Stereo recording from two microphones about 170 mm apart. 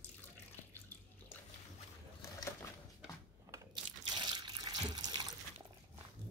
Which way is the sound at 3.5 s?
25° right (ahead or behind).